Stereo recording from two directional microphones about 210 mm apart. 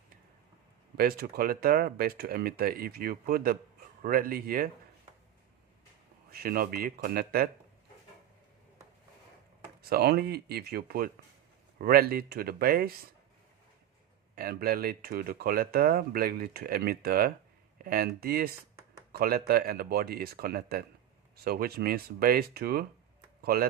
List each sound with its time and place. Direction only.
0.9 s speech: 45° right (ahead or behind)
6.3 s speech: 45° right (ahead or behind)
9.9 s speech: 50° right (ahead or behind)
14.3 s speech: 45° right (ahead or behind)